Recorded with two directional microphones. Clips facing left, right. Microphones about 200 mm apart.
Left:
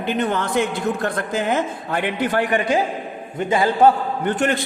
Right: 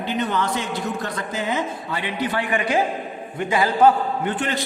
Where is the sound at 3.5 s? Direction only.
25° left (ahead or behind).